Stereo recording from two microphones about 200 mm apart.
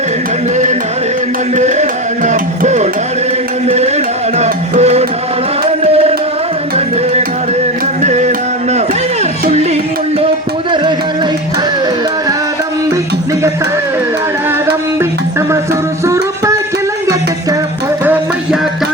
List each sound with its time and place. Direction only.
0.5 s music: 35° right (ahead or behind)
16.0 s music: 15° right (ahead or behind)